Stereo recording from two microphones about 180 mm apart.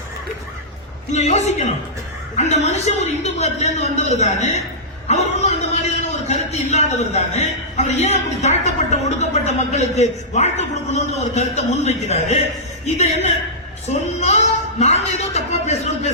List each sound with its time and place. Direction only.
1.1 s a man's voice: 40° left (ahead or behind)